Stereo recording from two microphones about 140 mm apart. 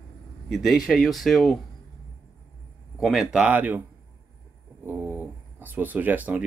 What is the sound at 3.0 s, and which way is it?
Speech, 5° right (ahead or behind).